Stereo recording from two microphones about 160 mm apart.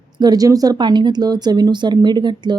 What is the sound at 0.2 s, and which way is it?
Speech, 25° right (ahead or behind).